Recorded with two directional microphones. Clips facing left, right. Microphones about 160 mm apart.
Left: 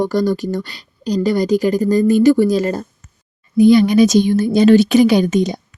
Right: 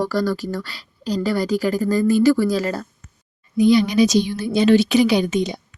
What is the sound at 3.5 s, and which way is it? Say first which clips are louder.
Speech: left 5 dB; 50° left (ahead or behind).